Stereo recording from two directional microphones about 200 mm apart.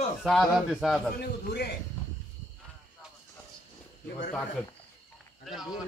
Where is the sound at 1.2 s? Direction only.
55° left (ahead or behind).